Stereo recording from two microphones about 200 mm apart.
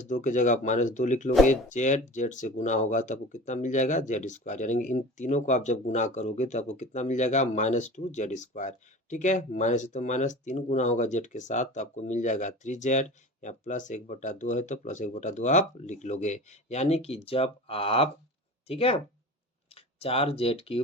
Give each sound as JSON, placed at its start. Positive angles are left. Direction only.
{"t": 0.1, "sound": "speech", "side_deg": 40}